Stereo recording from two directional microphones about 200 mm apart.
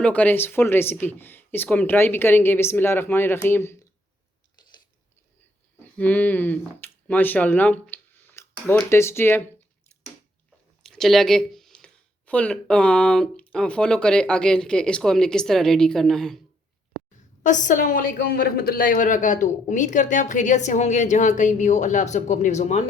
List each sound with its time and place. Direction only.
0.0 s speech: 5° left (ahead or behind)
5.8 s speech: 5° left (ahead or behind)
10.8 s speech: centre (ahead or behind)
17.4 s a woman's voice: 40° left (ahead or behind)